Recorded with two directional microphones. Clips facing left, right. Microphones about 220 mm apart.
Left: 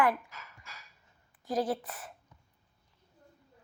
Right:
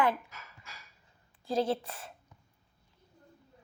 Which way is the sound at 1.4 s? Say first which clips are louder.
Right 1 dB; 25° right (ahead or behind).